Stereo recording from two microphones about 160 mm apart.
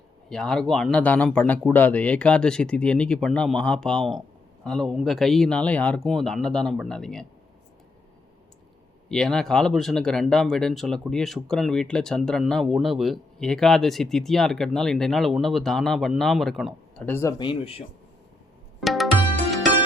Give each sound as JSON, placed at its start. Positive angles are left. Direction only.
{"t": 0.3, "sound": "speech", "side_deg": 5}
{"t": 9.0, "sound": "speech", "side_deg": 5}
{"t": 17.3, "sound": "speech", "side_deg": 30}
{"t": 18.8, "sound": "tabla", "side_deg": 0}